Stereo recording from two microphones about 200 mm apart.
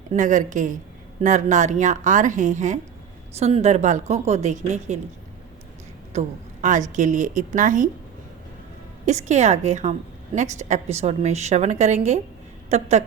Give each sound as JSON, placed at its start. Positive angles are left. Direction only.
{"t": 0.1, "sound": "a woman's voice", "side_deg": -40}
{"t": 6.1, "sound": "a woman's voice", "side_deg": -40}
{"t": 9.0, "sound": "a woman's voice", "side_deg": -35}